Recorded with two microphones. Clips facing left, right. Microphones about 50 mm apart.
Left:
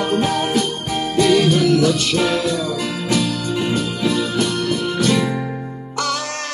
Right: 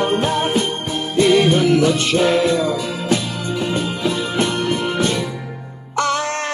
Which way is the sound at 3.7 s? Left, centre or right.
Right.